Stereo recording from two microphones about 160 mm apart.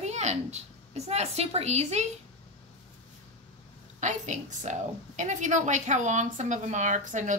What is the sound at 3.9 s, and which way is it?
A woman's voice, 50° right (ahead or behind).